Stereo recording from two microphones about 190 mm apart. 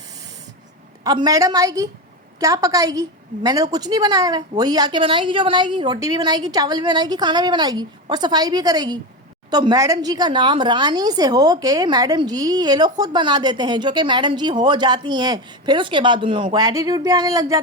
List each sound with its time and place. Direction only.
1.0 s a woman's voice: 20° right (ahead or behind)